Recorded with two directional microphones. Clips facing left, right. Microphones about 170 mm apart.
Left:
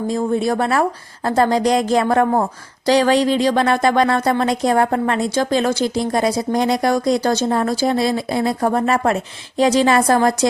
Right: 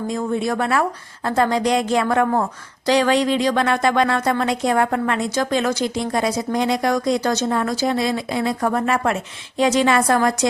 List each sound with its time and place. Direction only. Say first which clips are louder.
0.1 s speech: left 4 dB; 35° left (ahead or behind)